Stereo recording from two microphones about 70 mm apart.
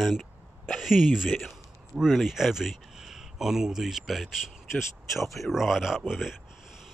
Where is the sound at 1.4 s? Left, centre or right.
Centre.